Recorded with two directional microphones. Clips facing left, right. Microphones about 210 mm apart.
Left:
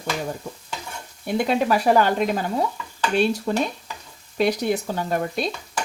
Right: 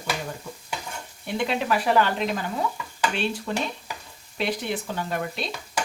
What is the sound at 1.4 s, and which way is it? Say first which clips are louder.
Speech: left 4 dB; 40° left (ahead or behind).